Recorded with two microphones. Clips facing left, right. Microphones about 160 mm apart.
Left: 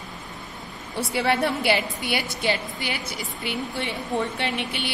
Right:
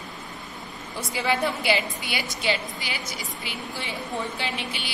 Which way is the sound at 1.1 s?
65° left (ahead or behind).